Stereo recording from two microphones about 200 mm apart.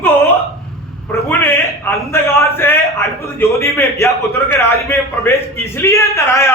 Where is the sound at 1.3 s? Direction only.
15° left (ahead or behind).